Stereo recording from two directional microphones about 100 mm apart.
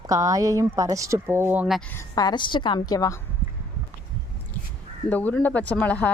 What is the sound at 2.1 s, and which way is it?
A woman's voice, 45° left (ahead or behind).